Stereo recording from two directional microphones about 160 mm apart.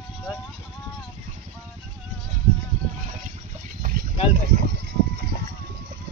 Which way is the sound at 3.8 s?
55° right (ahead or behind).